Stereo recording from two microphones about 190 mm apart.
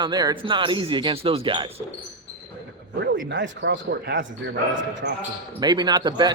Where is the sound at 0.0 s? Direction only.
20° right (ahead or behind).